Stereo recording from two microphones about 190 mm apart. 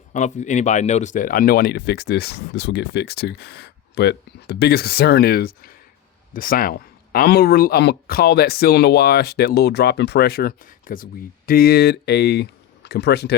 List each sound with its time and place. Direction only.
0.1 s speech: 40° left (ahead or behind); by 13.3 s 60° left (ahead or behind)